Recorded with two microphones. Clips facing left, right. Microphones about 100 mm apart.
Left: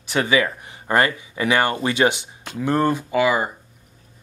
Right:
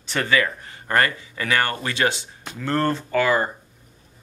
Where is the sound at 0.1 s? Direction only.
15° left (ahead or behind).